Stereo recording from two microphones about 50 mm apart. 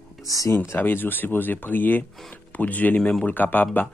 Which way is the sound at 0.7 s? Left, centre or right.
Left.